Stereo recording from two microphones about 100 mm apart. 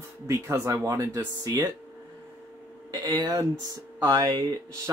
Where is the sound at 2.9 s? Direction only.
40° right (ahead or behind).